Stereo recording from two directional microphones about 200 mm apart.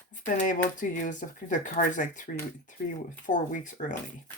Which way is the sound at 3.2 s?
40° left (ahead or behind).